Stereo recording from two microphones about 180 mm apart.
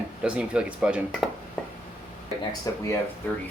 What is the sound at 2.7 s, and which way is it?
Speech, 20° left (ahead or behind).